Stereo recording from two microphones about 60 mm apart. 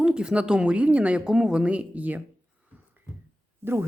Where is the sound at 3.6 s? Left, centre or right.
Right.